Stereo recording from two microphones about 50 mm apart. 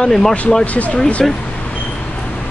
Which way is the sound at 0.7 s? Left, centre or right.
Left.